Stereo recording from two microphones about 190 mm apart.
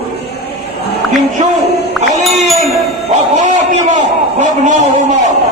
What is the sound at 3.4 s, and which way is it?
A man's voice, 40° right (ahead or behind).